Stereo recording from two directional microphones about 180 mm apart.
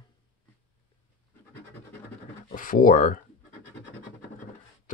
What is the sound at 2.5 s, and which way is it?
Speech, 50° left (ahead or behind).